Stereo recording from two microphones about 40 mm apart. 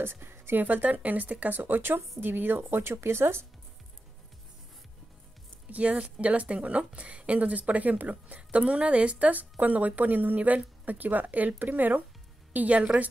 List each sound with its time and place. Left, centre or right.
0.0 s music: right
0.6 s a woman's voice: right
5.7 s speech: right
12.5 s speech: right